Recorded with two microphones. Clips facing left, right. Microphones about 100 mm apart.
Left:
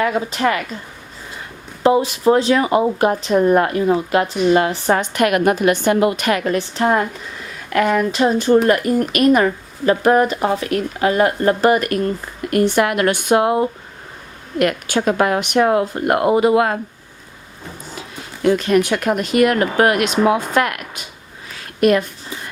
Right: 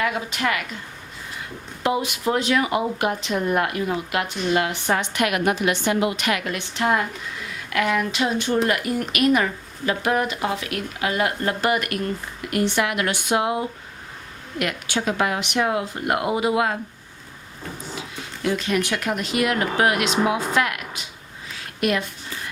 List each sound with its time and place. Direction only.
0.0 s speech: 35° left (ahead or behind)
1.8 s speech: 35° left (ahead or behind); by 16.7 s 50° left (ahead or behind)
18.4 s a woman's voice: 50° left (ahead or behind)